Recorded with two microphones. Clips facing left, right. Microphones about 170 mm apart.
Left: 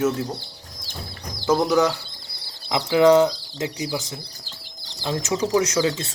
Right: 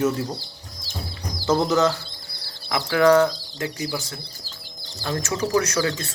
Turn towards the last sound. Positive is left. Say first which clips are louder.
# left 2 dB
turn(degrees=20)  # may be behind; listen again after turning